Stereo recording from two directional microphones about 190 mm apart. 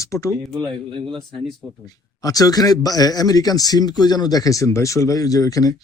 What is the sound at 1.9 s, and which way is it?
Speech, 20° left (ahead or behind).